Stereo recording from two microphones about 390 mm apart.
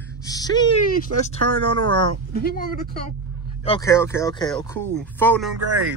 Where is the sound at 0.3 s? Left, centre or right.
Centre.